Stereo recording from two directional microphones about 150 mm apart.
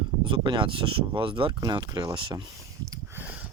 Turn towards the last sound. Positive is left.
turn(degrees=-15)  # may be behind; listen again after turning